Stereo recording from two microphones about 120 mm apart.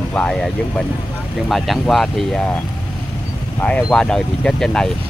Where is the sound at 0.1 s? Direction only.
10° left (ahead or behind).